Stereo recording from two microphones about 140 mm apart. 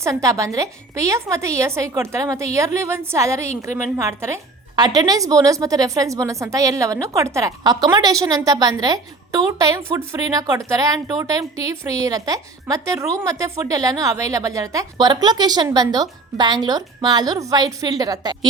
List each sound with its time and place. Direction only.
0.0 s a woman's voice: 25° right (ahead or behind)